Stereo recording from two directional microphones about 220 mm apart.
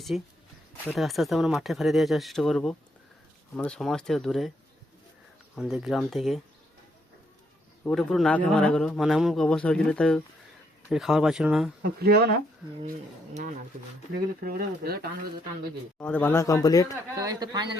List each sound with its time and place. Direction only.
0.1 s a man's voice: centre (ahead or behind)
5.5 s a man's voice: centre (ahead or behind)
7.9 s a man's voice: centre (ahead or behind)
11.8 s speech: 45° right (ahead or behind)
14.4 s speech: 45° right (ahead or behind)
16.0 s speech: 5° left (ahead or behind)
17.2 s speech: 15° right (ahead or behind)